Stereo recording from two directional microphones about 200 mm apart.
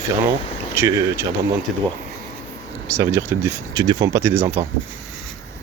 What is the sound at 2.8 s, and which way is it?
Speech, 15° right (ahead or behind).